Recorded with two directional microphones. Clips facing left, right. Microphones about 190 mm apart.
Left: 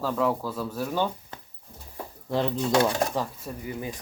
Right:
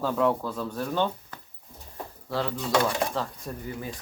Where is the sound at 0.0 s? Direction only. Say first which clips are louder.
Right 1 dB; centre (ahead or behind).